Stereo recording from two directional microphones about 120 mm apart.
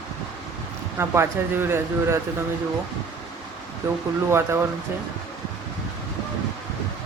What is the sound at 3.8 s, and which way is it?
Speech, 20° right (ahead or behind).